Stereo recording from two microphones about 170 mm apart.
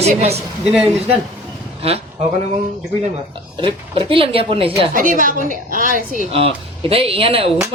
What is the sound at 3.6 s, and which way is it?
Speech, 30° right (ahead or behind).